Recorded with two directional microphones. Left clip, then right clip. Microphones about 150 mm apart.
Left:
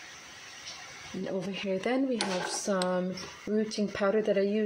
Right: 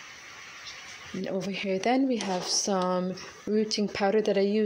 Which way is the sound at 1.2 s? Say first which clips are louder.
Right 3 dB; 10° right (ahead or behind).